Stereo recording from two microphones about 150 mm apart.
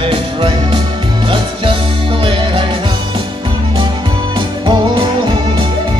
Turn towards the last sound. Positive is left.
turn(degrees=-30)  # may be behind; listen again after turning